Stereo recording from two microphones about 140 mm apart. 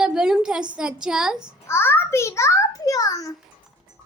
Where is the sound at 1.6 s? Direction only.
15° left (ahead or behind).